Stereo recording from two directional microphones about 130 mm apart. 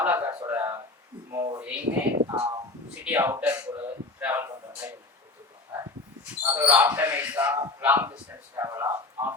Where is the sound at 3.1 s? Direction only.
15° right (ahead or behind).